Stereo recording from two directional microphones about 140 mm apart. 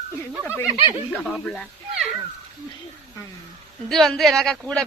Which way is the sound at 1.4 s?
5° left (ahead or behind).